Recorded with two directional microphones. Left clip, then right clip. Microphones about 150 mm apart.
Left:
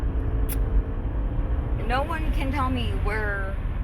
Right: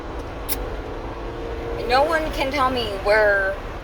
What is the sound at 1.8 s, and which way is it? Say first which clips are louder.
Speech: right 9 dB; 25° right (ahead or behind).